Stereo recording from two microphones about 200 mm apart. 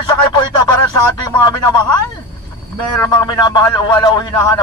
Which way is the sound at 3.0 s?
20° left (ahead or behind).